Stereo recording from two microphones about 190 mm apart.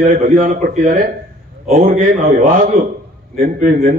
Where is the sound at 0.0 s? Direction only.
45° right (ahead or behind).